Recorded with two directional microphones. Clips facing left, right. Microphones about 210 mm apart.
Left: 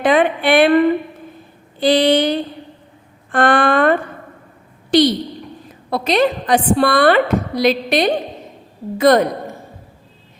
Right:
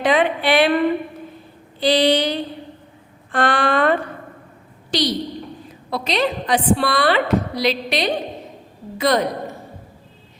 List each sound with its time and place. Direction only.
0.0 s a woman's voice: 50° left (ahead or behind)
1.8 s a sound: 50° left (ahead or behind)
4.9 s a woman's voice: 55° left (ahead or behind)